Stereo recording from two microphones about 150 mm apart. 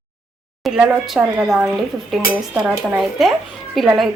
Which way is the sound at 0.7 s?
Centre (ahead or behind).